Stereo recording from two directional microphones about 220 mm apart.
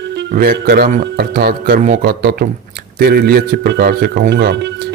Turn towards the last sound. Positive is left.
turn(degrees=-50)  # may be behind; listen again after turning